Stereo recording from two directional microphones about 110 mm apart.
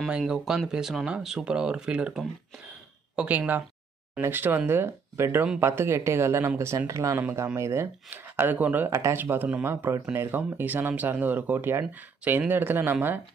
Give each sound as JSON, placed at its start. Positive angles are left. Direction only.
{"t": 0.2, "sound": "speech", "side_deg": 0}